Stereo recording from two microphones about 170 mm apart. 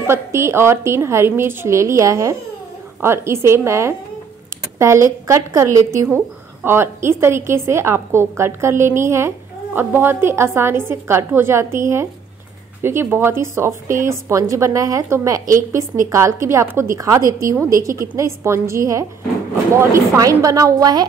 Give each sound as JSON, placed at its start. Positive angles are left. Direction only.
{"t": 0.0, "sound": "a woman's voice", "side_deg": -15}